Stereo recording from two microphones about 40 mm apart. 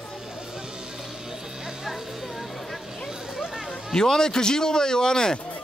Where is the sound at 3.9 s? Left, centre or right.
Centre.